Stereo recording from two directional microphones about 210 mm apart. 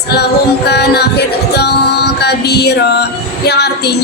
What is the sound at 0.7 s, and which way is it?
Music, 50° left (ahead or behind).